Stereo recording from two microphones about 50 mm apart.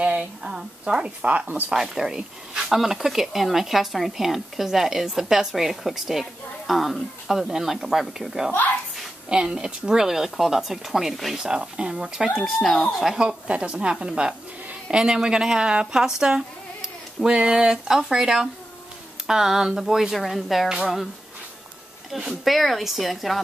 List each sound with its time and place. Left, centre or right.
0.0 s speech: right
1.2 s speech: right
1.7 s a woman's voice: centre
9.3 s a woman's voice: centre
12.4 s speech: centre
13.5 s a woman's voice: right
16.2 s a sound: centre
17.5 s a woman's voice: centre
22.3 s speech: centre